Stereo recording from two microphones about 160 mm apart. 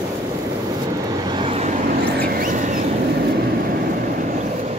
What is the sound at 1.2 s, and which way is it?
Vehicle, 30° right (ahead or behind).